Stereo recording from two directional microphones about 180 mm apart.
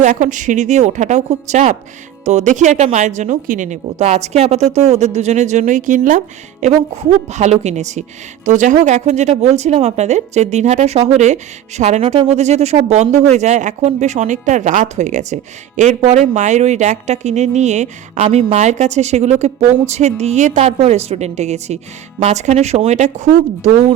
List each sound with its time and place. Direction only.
0.0 s speech: 45° right (ahead or behind)